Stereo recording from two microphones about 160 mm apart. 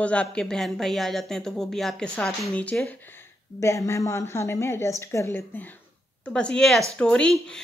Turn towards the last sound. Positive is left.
turn(degrees=5)  # may be behind; listen again after turning